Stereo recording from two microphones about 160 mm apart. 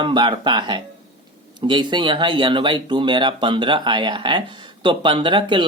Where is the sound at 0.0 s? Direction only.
30° right (ahead or behind).